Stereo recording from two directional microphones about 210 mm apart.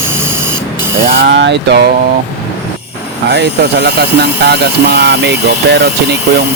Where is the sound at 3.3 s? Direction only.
50° right (ahead or behind).